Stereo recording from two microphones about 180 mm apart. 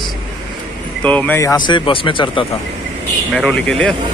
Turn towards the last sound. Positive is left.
turn(degrees=5)  # may be behind; listen again after turning